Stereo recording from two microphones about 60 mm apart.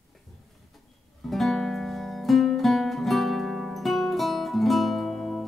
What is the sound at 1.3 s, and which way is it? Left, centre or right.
Music, centre.